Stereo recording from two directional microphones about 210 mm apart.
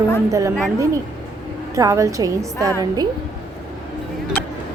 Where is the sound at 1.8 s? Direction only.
15° right (ahead or behind).